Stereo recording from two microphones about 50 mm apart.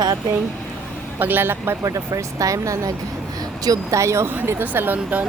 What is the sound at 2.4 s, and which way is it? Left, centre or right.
Speech, right.